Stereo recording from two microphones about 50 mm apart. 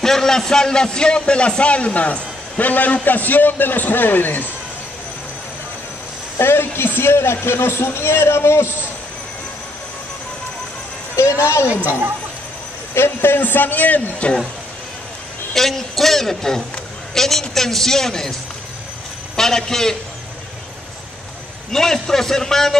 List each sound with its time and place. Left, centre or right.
0.0 s a man's voice: centre; by 4.5 s left
6.3 s a man's voice: left
11.6 s a woman's voice: right
12.9 s a man's voice: left
13.4 s a man's voice: left
15.5 s a man's voice: centre
19.3 s a man's voice: centre
21.7 s a man's voice: centre